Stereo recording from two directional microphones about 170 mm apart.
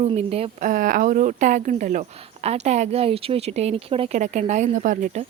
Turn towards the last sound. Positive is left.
turn(degrees=-50)  # may be behind; listen again after turning